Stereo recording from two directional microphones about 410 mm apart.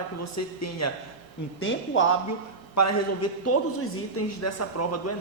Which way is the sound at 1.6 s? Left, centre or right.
Left.